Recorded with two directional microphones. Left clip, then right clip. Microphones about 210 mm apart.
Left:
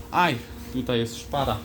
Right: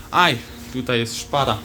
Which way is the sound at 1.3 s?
15° right (ahead or behind).